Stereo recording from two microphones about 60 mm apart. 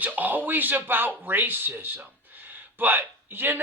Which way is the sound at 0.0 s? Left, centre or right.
Right.